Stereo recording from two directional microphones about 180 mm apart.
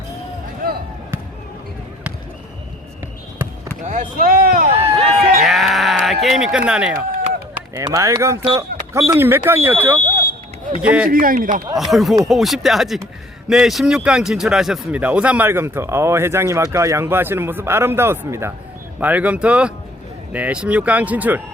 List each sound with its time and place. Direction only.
0.6 s basketball bounce: 50° right (ahead or behind)
3.8 s a sound: 50° right (ahead or behind)
5.4 s sheep: centre (ahead or behind)
6.1 s speech: centre (ahead or behind)
7.1 s run: 50° right (ahead or behind)
7.8 s speech: 15° right (ahead or behind)
11.1 s speech: 50° right (ahead or behind)
11.8 s speech: centre (ahead or behind)